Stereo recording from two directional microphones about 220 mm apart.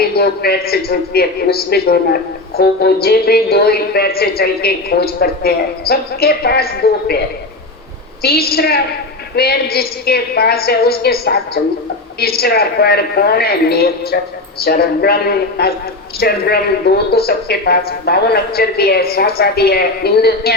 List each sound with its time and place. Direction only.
0.0 s a woman's voice: 45° left (ahead or behind)
8.2 s a woman's voice: 45° left (ahead or behind)